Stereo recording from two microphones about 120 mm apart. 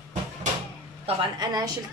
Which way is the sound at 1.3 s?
35° right (ahead or behind).